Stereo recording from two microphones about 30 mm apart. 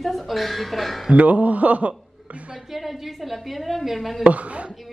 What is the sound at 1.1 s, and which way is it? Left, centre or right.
Speech, right.